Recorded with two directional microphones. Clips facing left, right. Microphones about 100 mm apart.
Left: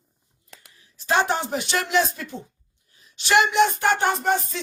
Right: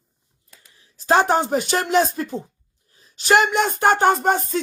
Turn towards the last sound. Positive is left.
turn(degrees=-45)  # may be behind; listen again after turning